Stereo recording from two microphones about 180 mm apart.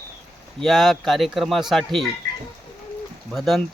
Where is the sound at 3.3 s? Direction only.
Centre (ahead or behind).